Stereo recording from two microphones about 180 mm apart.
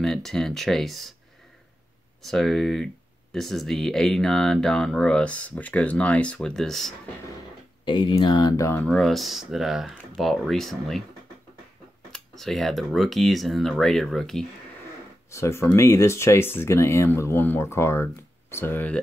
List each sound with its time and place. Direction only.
0.0 s speech: centre (ahead or behind)
2.2 s speech: centre (ahead or behind)
7.8 s speech: 25° left (ahead or behind)
8.8 s speech: 5° left (ahead or behind)
12.1 s speech: centre (ahead or behind)
15.3 s speech: 15° left (ahead or behind)